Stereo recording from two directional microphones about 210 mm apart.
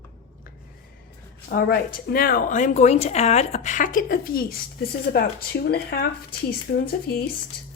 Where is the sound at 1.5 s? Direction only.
45° left (ahead or behind).